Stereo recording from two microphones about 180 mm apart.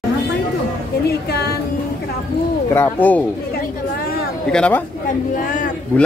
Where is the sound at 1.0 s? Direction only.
65° left (ahead or behind).